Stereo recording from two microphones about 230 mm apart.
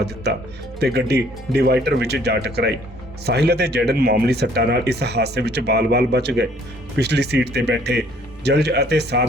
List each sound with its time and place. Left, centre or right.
0.8 s speech: right